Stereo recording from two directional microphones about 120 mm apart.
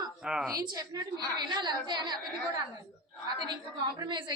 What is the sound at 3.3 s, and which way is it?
Speech, 35° right (ahead or behind).